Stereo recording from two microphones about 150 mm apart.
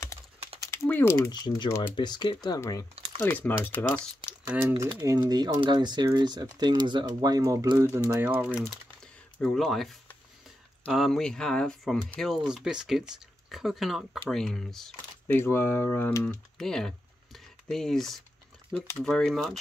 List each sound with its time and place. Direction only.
0.8 s speech: 15° left (ahead or behind)
1.3 s speech: 25° left (ahead or behind)
4.5 s speech: 15° right (ahead or behind)
4.8 s speech: 25° right (ahead or behind)
8.2 s speech: 10° right (ahead or behind)
9.0 s a sound: 5° left (ahead or behind)
10.9 s speech: centre (ahead or behind)
15.3 s speech: 15° left (ahead or behind)
16.5 s typing: 5° left (ahead or behind)
18.7 s speech: 5° left (ahead or behind)